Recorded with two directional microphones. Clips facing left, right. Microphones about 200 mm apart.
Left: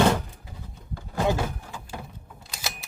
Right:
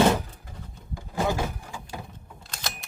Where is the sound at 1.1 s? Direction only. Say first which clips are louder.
Left 1 dB; 10° right (ahead or behind).